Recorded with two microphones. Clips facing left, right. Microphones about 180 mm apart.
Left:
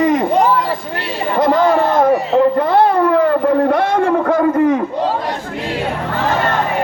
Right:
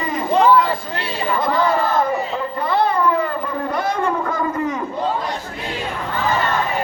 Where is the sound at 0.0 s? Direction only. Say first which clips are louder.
Left 10 dB; 75° left (ahead or behind).